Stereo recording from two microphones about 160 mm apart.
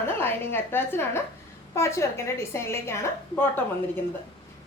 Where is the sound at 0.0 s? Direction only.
15° left (ahead or behind).